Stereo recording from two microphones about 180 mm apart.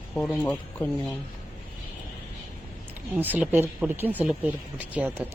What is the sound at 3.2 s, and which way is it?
Speech, 10° right (ahead or behind).